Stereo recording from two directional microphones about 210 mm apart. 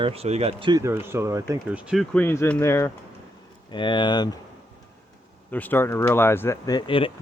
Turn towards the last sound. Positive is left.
turn(degrees=25)  # may be behind; listen again after turning